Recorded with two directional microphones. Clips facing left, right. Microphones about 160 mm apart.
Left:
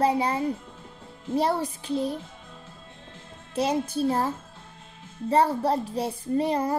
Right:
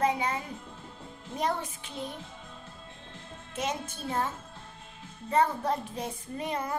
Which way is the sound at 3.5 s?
35° left (ahead or behind).